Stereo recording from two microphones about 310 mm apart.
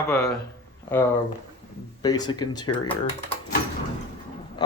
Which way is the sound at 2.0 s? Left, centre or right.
Centre.